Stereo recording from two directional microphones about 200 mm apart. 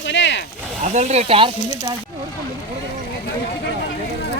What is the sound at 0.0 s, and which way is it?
Speech, 65° left (ahead or behind).